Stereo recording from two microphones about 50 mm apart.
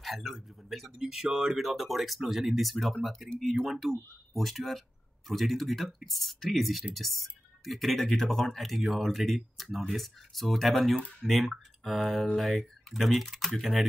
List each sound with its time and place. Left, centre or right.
0.0 s speech: centre
0.9 s speech: centre